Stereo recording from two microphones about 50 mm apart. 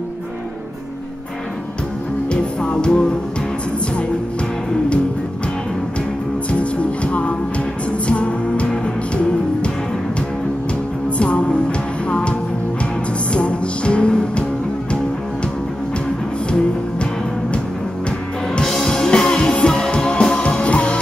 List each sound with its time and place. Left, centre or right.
2.6 s music: centre
6.6 s music: left
11.1 s music: left
18.7 s music: centre